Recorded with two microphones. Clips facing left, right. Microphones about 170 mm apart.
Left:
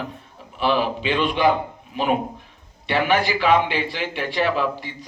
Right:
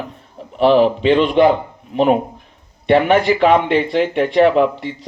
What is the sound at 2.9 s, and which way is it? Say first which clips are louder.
Speech: right 7 dB; 65° right (ahead or behind).